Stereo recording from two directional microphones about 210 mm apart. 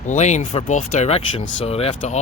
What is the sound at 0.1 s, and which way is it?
Speech, 35° left (ahead or behind).